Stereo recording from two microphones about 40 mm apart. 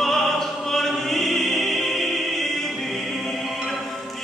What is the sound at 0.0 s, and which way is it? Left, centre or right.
Opera, centre.